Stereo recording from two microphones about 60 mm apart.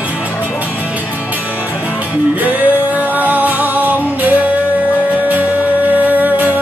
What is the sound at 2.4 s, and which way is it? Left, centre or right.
Music, right.